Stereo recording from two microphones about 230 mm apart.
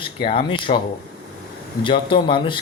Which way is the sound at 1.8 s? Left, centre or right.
Left.